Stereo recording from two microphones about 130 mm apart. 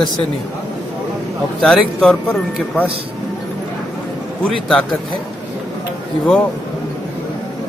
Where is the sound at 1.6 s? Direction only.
5° left (ahead or behind).